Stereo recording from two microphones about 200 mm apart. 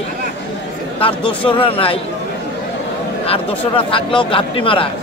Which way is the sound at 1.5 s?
25° left (ahead or behind).